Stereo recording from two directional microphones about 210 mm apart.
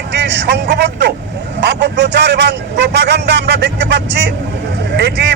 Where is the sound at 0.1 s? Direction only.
55° right (ahead or behind).